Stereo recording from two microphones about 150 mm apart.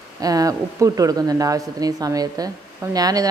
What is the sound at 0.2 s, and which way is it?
Speech, 25° right (ahead or behind).